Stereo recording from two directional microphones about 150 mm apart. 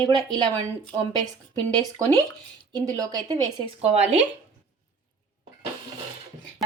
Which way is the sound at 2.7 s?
25° right (ahead or behind).